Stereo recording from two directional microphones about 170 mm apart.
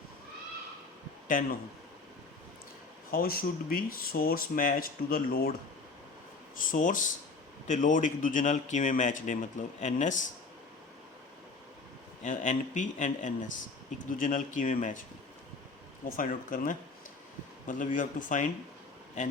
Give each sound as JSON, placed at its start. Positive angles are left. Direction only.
{"t": 1.3, "sound": "speech", "side_deg": 50}
{"t": 3.1, "sound": "speech", "side_deg": 60}
{"t": 6.6, "sound": "speech", "side_deg": 50}
{"t": 12.2, "sound": "speech", "side_deg": 45}
{"t": 16.0, "sound": "speech", "side_deg": 55}
{"t": 17.9, "sound": "speech", "side_deg": 50}